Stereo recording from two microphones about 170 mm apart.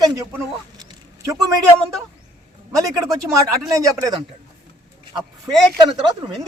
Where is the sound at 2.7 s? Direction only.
20° right (ahead or behind).